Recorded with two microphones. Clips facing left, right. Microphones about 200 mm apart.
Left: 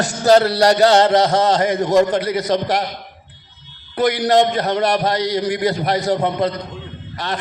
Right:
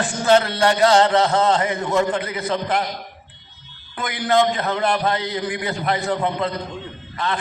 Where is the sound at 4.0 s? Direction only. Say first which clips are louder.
Left 4 dB; 40° left (ahead or behind).